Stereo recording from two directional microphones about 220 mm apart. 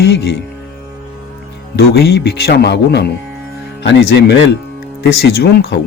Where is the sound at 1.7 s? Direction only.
50° left (ahead or behind).